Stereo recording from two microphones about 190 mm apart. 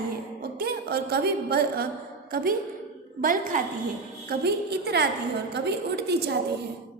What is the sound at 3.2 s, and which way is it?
Speech, 45° right (ahead or behind).